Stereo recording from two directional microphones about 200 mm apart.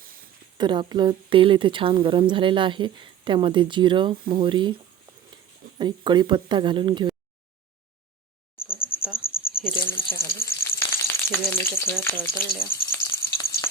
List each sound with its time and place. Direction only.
0.5 s a woman's voice: 20° right (ahead or behind)
5.7 s a woman's voice: 25° right (ahead or behind)
9.1 s cricket: 45° left (ahead or behind)
9.7 s speech: 10° left (ahead or behind)
12.6 s a sound: 10° left (ahead or behind)